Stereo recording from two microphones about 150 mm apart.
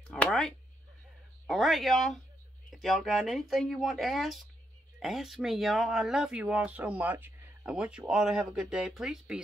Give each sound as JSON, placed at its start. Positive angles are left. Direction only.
{"t": 0.1, "sound": "speech", "side_deg": 5}